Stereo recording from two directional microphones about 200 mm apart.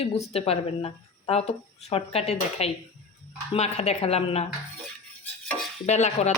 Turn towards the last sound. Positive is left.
turn(degrees=35)  # may be behind; listen again after turning